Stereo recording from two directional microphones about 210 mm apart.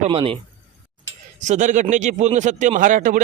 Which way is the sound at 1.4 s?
35° right (ahead or behind).